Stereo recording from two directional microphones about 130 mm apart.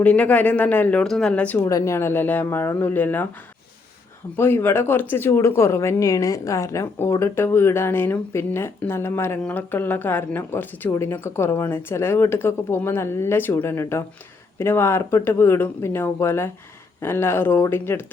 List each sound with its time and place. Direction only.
0.0 s speech: 10° left (ahead or behind)
1.5 s speech: 25° left (ahead or behind)
4.4 s speech: 15° left (ahead or behind)